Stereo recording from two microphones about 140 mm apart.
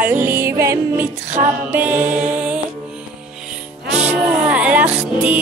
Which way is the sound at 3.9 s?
10° right (ahead or behind).